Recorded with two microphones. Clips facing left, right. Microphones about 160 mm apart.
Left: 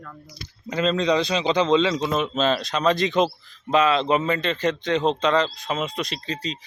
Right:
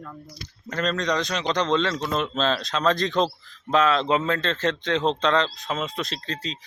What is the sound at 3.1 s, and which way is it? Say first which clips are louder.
Speech: left 2 dB; 20° left (ahead or behind).